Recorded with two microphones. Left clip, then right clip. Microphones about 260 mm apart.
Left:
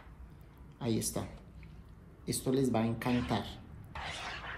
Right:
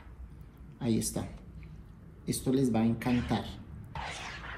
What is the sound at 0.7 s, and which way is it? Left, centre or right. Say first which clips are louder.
Speech: right 2 dB; left.